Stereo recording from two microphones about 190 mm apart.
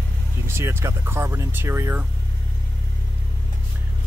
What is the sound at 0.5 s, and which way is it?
Speech, 10° right (ahead or behind).